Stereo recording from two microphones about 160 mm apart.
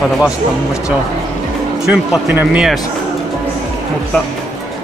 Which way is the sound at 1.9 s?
10° right (ahead or behind).